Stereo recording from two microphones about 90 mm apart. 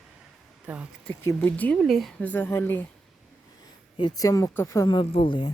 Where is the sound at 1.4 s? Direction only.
15° left (ahead or behind).